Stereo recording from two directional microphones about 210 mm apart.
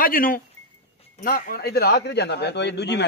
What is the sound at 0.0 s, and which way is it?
A man's voice, 40° left (ahead or behind).